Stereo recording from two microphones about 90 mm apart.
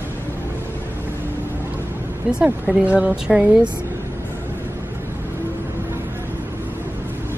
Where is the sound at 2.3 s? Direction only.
10° right (ahead or behind).